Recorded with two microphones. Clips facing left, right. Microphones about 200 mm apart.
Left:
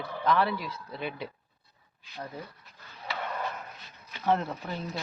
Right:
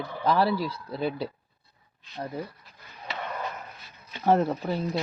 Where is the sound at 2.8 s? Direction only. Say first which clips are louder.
Even; 20° right (ahead or behind).